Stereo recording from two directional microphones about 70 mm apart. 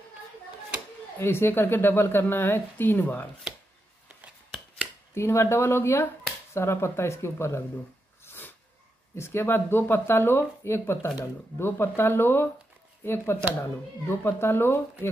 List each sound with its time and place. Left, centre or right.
1.2 s a woman's voice: left
5.1 s a woman's voice: left
9.1 s a woman's voice: left